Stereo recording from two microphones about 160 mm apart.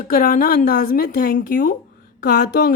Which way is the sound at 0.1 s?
65° left (ahead or behind).